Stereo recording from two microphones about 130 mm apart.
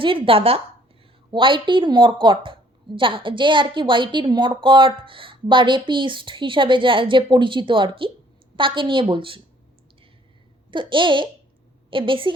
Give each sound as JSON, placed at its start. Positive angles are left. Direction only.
{"t": 0.0, "sound": "a woman's voice", "side_deg": -45}
{"t": 10.7, "sound": "a woman's voice", "side_deg": -40}